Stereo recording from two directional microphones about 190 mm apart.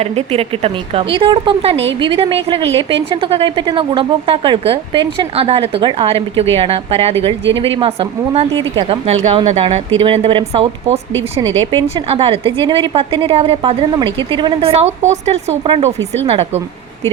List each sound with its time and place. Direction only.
0.0 s a woman's voice: 30° right (ahead or behind)